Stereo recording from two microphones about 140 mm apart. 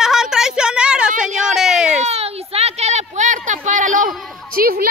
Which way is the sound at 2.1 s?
45° right (ahead or behind).